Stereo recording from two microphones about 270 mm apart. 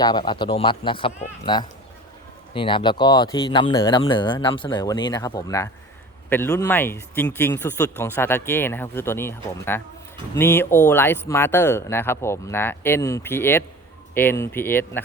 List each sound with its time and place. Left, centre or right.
0.0 s speech: centre